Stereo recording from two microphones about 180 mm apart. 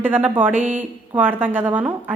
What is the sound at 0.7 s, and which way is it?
A woman's voice, 10° right (ahead or behind).